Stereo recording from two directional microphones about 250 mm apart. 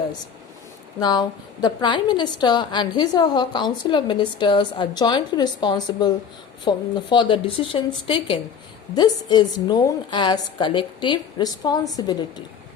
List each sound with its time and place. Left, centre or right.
0.9 s a woman's voice: centre